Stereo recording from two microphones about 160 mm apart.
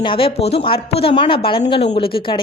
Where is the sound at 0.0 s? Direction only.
35° left (ahead or behind).